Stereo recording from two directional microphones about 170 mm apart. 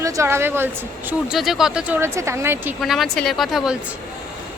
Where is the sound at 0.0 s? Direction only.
15° right (ahead or behind).